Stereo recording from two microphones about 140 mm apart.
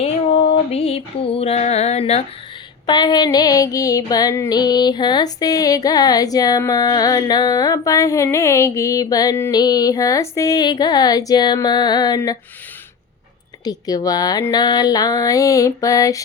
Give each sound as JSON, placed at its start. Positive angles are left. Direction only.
{"t": 0.7, "sound": "a sound", "side_deg": 45}
{"t": 2.8, "sound": "music", "side_deg": 30}
{"t": 13.7, "sound": "music", "side_deg": 25}